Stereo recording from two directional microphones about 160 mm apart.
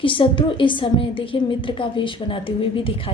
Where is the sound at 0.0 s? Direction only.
30° left (ahead or behind).